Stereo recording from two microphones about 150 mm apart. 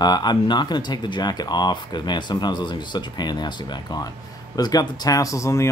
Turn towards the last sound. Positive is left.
turn(degrees=20)  # may be behind; listen again after turning